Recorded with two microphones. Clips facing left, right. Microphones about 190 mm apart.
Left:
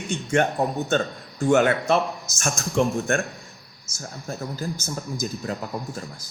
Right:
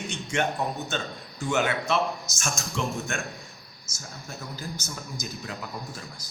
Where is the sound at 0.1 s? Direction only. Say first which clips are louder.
Left 7 dB; 50° left (ahead or behind).